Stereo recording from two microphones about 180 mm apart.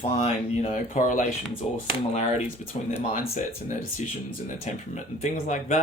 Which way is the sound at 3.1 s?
45° left (ahead or behind).